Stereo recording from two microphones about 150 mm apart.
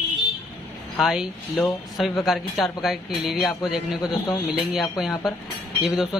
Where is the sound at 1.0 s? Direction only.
Centre (ahead or behind).